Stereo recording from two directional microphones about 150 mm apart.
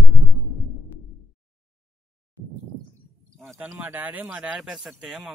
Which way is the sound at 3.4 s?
Centre (ahead or behind).